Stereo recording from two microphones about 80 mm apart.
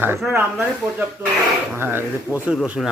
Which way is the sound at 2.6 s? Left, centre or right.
Centre.